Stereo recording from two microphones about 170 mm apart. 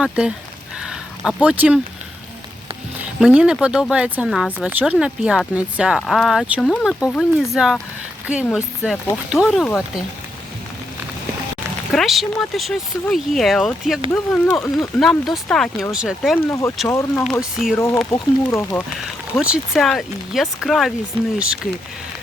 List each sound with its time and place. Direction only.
0.0 s speech: 5° right (ahead or behind)
0.8 s a sound: 5° right (ahead or behind)
3.2 s speech: 5° right (ahead or behind)
11.9 s speech: centre (ahead or behind)
16.5 s speech: 15° left (ahead or behind)
17.2 s speech: centre (ahead or behind)
18.1 s speech: 15° left (ahead or behind)
19.4 s speech: 5° right (ahead or behind)